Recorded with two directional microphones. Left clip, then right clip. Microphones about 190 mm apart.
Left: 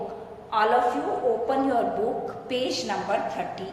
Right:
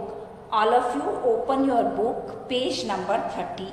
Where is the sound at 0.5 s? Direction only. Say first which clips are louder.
Right 1 dB; 20° right (ahead or behind).